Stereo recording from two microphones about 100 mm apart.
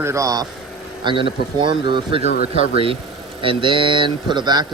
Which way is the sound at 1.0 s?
55° right (ahead or behind).